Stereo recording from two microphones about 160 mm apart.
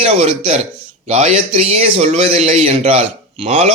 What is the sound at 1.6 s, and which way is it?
Speech, 40° right (ahead or behind).